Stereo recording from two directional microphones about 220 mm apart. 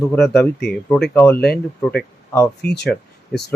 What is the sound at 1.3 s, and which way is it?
Speech, 45° left (ahead or behind).